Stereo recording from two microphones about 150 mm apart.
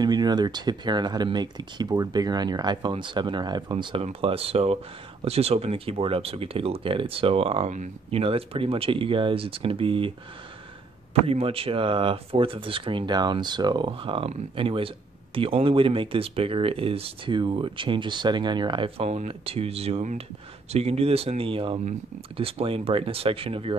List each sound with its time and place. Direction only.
0.0 s speech: 30° right (ahead or behind)
7.7 s speech: 55° right (ahead or behind)
8.2 s speech: 40° right (ahead or behind)
11.2 s speech: 40° right (ahead or behind)